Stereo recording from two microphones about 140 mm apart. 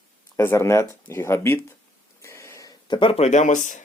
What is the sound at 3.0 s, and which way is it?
Speech, 45° left (ahead or behind).